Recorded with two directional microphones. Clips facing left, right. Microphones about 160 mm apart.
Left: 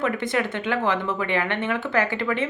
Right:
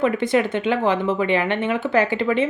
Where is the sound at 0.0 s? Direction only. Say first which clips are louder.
Right 5 dB; 25° right (ahead or behind).